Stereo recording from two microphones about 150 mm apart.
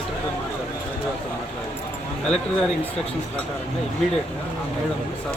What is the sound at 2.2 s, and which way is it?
Speech, 5° left (ahead or behind).